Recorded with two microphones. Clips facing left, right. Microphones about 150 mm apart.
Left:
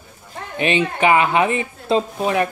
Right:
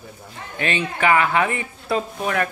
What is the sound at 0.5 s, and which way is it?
Speech, 20° left (ahead or behind).